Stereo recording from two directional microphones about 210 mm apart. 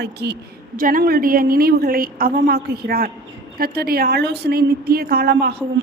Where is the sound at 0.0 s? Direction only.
50° right (ahead or behind).